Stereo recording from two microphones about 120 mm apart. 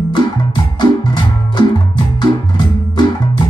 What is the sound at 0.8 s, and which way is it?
Music, 35° left (ahead or behind).